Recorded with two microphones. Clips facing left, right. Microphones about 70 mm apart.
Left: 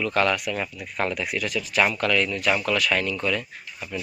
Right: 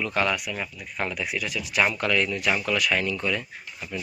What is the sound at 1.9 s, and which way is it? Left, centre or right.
Speech, right.